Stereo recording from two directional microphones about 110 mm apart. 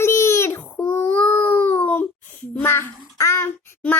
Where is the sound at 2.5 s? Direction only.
20° left (ahead or behind).